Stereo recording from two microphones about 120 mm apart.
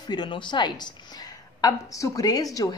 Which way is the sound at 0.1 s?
40° left (ahead or behind).